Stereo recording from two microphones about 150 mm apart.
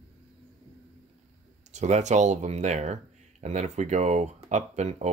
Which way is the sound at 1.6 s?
50° right (ahead or behind).